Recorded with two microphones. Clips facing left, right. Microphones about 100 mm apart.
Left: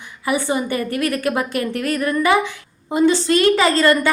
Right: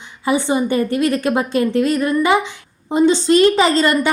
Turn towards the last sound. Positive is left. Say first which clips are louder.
# right 1 dB
turn(degrees=-20)  # may be behind; listen again after turning